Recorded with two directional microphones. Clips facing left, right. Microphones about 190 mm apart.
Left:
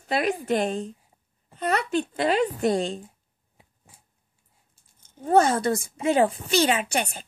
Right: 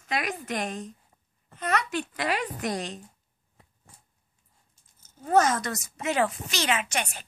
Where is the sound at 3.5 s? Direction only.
10° left (ahead or behind).